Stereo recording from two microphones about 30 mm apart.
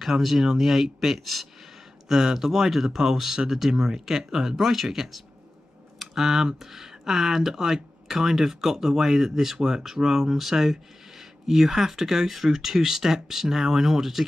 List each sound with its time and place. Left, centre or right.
0.0 s speech: centre
2.0 s speech: centre
4.8 s speech: centre